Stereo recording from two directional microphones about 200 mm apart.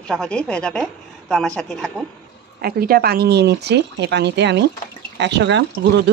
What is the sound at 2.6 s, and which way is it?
Speech, 50° right (ahead or behind).